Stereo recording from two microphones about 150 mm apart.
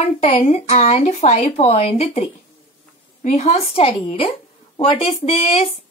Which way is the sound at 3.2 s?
45° left (ahead or behind).